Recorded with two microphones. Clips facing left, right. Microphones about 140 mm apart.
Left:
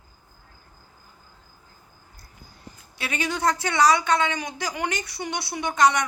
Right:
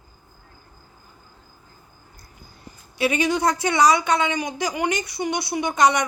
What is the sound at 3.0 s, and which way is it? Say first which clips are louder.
Speech: right 5 dB; 15° right (ahead or behind).